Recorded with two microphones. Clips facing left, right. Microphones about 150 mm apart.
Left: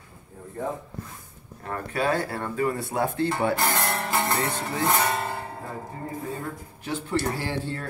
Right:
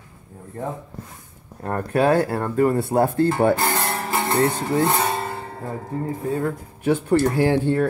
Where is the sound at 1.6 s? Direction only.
50° right (ahead or behind).